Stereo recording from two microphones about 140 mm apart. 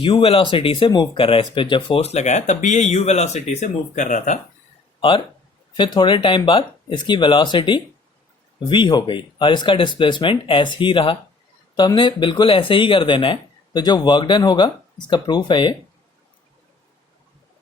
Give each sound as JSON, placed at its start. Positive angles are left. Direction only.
{"t": 0.0, "sound": "speech", "side_deg": 40}
{"t": 4.9, "sound": "speech", "side_deg": 35}